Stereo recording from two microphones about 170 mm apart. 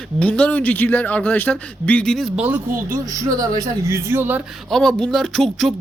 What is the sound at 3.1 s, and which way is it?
Speech, 20° right (ahead or behind).